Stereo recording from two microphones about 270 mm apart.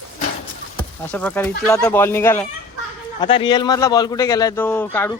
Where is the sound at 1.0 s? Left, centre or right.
Centre.